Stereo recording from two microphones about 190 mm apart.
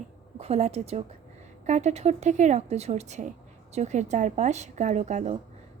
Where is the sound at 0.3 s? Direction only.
35° right (ahead or behind).